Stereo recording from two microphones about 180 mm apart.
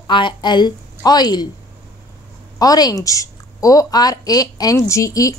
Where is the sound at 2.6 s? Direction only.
20° left (ahead or behind).